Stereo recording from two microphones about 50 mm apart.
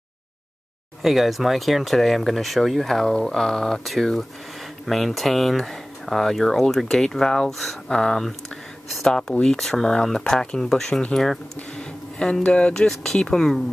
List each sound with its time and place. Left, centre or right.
1.0 s speech: centre
11.8 s a sound: centre
12.4 s speech: centre